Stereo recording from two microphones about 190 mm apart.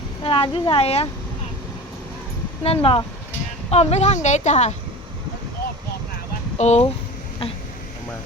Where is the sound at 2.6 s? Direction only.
30° left (ahead or behind).